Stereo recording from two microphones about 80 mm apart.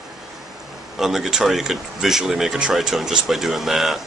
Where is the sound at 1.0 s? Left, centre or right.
Centre.